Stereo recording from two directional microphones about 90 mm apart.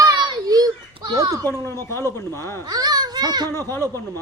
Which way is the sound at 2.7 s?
45° right (ahead or behind).